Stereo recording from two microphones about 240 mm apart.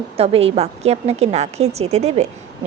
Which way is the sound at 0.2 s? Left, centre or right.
Right.